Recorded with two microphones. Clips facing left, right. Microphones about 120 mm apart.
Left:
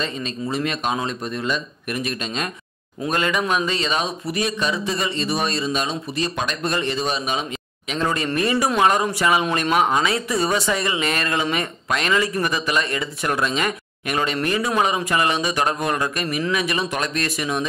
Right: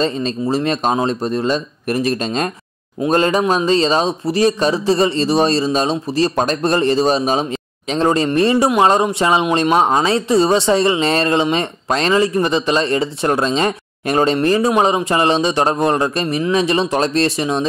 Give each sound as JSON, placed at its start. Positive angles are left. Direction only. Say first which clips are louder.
{"t": 0.0, "sound": "speech", "louder": "right 8 dB", "side_deg": -35}